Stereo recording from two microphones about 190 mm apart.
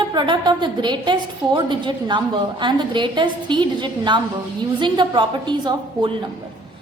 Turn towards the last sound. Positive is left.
turn(degrees=-25)  # may be behind; listen again after turning